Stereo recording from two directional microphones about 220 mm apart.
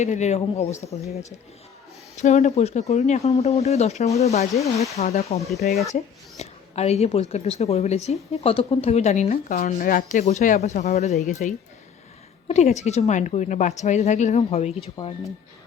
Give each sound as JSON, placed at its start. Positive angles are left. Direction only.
{"t": 0.0, "sound": "a woman's voice", "side_deg": 30}
{"t": 2.1, "sound": "a woman's voice", "side_deg": 30}
{"t": 15.0, "sound": "speech", "side_deg": 20}